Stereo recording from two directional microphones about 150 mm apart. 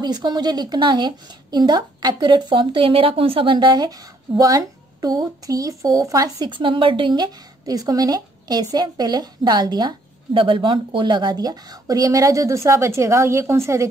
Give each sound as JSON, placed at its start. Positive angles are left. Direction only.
{"t": 0.0, "sound": "speech", "side_deg": -30}